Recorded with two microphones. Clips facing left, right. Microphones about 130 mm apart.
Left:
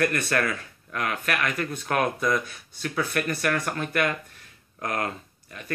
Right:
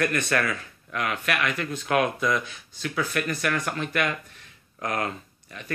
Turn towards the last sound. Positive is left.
turn(degrees=40)  # may be behind; listen again after turning